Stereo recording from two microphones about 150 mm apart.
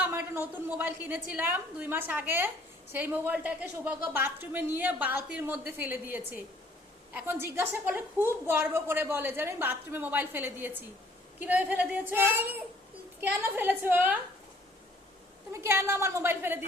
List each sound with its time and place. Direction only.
0.0 s a woman's voice: 15° right (ahead or behind)
15.5 s a woman's voice: 15° right (ahead or behind)